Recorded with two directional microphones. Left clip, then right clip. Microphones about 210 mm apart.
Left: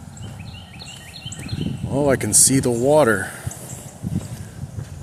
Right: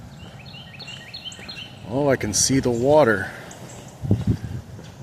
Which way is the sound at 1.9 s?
20° left (ahead or behind).